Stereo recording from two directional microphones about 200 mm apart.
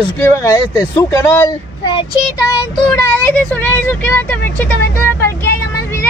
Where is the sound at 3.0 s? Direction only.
15° left (ahead or behind).